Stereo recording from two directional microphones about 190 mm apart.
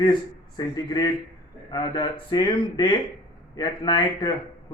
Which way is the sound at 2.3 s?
25° left (ahead or behind).